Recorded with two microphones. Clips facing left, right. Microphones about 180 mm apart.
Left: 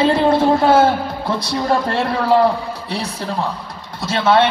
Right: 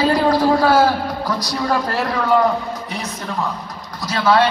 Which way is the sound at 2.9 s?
30° left (ahead or behind).